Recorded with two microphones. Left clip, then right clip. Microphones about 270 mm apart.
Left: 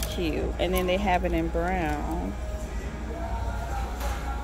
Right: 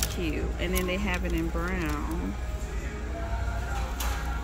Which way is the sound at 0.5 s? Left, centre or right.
Centre.